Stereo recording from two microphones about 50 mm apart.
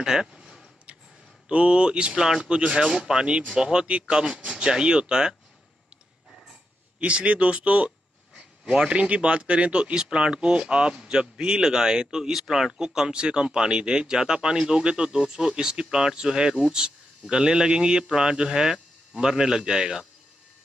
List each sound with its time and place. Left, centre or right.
0.0 s a sound: centre
1.5 s speech: right
7.0 s speech: right